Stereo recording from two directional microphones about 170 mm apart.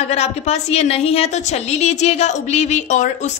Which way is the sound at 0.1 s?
40° left (ahead or behind).